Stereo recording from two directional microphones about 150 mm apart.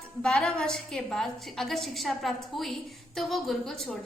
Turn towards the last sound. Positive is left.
turn(degrees=0)  # may be behind; listen again after turning